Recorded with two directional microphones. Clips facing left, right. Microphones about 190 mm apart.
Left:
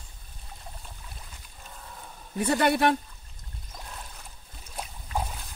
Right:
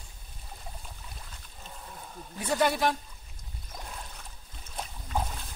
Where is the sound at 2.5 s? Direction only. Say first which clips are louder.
Left 3 dB; 60° left (ahead or behind).